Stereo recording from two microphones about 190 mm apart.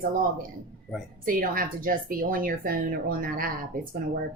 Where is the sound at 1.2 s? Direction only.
45° right (ahead or behind).